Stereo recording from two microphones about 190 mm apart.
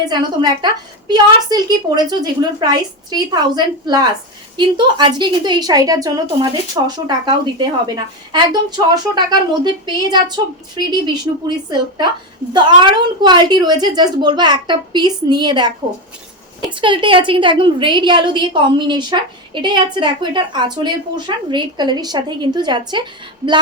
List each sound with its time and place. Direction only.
0.6 s a woman's voice: 20° right (ahead or behind)